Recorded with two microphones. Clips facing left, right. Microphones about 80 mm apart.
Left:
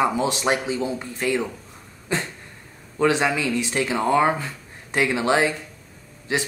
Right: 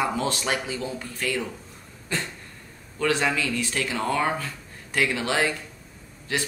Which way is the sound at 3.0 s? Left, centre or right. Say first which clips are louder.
Left 4 dB; centre.